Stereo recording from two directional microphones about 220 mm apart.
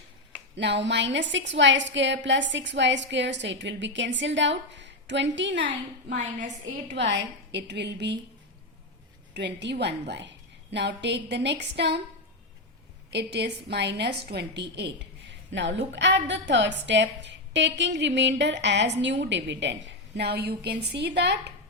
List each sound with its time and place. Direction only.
0.5 s a woman's voice: 50° right (ahead or behind)
5.6 s a woman's voice: 35° right (ahead or behind)
6.9 s speech: 55° right (ahead or behind)
9.3 s speech: 50° right (ahead or behind)
13.1 s speech: 50° right (ahead or behind)